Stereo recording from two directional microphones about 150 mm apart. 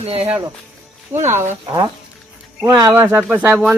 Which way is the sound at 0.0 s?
40° right (ahead or behind).